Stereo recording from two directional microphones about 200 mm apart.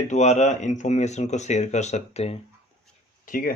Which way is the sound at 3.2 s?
45° left (ahead or behind).